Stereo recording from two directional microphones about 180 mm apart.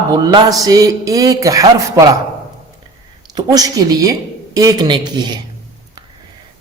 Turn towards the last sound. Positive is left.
turn(degrees=-25)  # may be behind; listen again after turning